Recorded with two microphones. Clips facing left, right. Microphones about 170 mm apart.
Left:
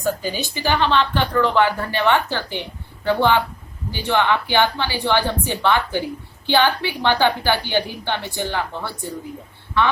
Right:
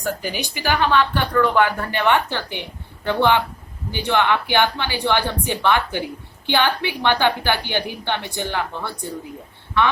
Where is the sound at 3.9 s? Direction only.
15° right (ahead or behind).